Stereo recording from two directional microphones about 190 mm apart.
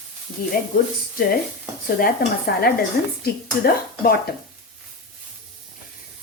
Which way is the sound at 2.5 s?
55° left (ahead or behind).